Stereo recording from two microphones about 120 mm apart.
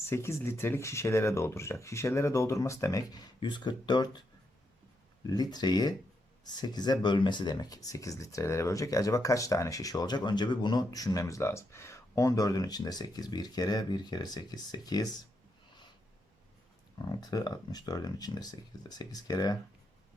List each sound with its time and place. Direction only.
0.1 s speech: 20° left (ahead or behind)
3.4 s speech: 40° left (ahead or behind)
5.2 s speech: 35° left (ahead or behind)
17.1 s speech: 35° left (ahead or behind)